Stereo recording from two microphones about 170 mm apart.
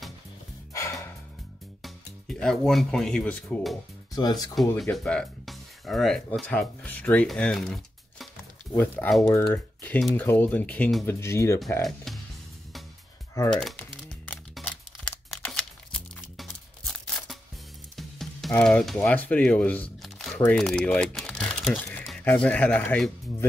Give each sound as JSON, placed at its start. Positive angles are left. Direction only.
{"t": 1.8, "sound": "speech", "side_deg": 5}
{"t": 4.1, "sound": "speech", "side_deg": 25}
{"t": 4.6, "sound": "speech", "side_deg": 0}
{"t": 8.7, "sound": "speech", "side_deg": 15}
{"t": 11.1, "sound": "speech", "side_deg": 15}
{"t": 11.8, "sound": "speech", "side_deg": 0}
{"t": 13.3, "sound": "speech", "side_deg": 15}
{"t": 13.6, "sound": "music", "side_deg": 5}
{"t": 18.5, "sound": "speech", "side_deg": 5}